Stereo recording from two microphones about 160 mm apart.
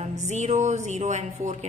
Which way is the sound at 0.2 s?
45° right (ahead or behind).